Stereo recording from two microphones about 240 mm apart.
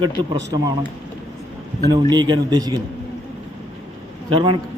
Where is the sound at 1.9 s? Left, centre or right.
Centre.